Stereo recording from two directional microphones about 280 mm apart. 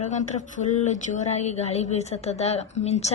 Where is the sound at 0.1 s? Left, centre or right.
Left.